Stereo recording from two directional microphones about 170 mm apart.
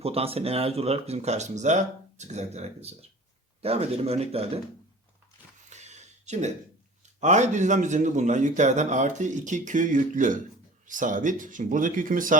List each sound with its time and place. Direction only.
0.0 s speech: 35° right (ahead or behind)
5.7 s a sound: 40° right (ahead or behind)
7.2 s speech: 45° right (ahead or behind)